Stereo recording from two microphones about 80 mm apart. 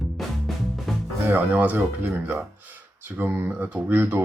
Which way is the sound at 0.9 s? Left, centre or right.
Centre.